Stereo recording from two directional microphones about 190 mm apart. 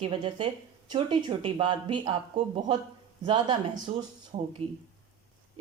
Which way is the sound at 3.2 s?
25° right (ahead or behind).